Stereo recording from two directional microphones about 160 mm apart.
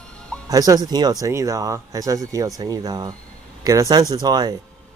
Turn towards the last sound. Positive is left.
turn(degrees=-25)  # may be behind; listen again after turning